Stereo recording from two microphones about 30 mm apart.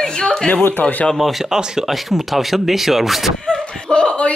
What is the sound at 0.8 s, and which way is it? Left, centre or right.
Speech, left.